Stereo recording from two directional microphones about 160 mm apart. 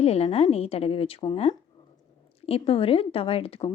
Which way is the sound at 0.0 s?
40° left (ahead or behind).